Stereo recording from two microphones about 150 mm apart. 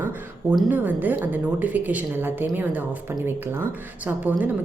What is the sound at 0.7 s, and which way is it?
A woman's voice, 10° right (ahead or behind).